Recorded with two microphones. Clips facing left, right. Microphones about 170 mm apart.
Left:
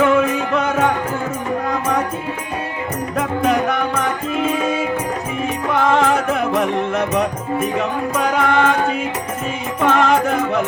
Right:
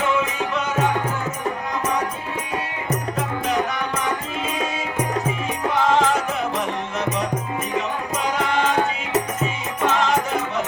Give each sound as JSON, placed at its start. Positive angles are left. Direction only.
{"t": 0.0, "sound": "music", "side_deg": 55}
{"t": 3.2, "sound": "music", "side_deg": 55}
{"t": 5.8, "sound": "music", "side_deg": 55}
{"t": 9.8, "sound": "music", "side_deg": 55}